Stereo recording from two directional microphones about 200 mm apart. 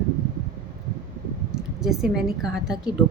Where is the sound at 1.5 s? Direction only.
Centre (ahead or behind).